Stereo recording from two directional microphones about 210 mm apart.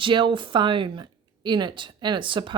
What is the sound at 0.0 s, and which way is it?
A woman's voice, 25° right (ahead or behind).